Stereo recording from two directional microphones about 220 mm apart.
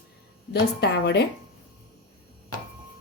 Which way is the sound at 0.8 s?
50° left (ahead or behind).